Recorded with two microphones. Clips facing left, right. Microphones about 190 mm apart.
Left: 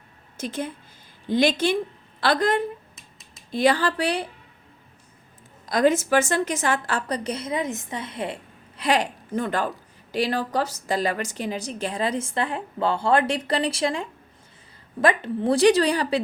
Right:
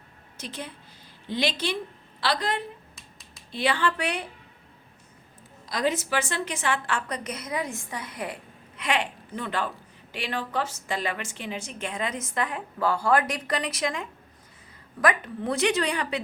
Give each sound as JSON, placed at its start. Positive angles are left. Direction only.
{"t": 0.3, "sound": "a woman's voice", "side_deg": 45}
{"t": 5.6, "sound": "a woman's voice", "side_deg": 50}
{"t": 8.8, "sound": "a woman's voice", "side_deg": 40}